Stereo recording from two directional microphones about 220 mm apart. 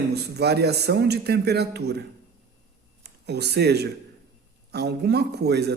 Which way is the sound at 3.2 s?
50° right (ahead or behind).